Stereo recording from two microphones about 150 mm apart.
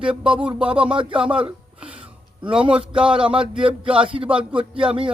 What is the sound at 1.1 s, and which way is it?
Speech, 5° right (ahead or behind).